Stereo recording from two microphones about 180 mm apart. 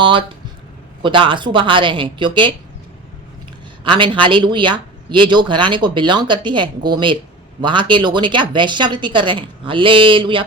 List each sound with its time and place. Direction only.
0.0 s a man's voice: 25° right (ahead or behind)
3.8 s a man's voice: 25° right (ahead or behind)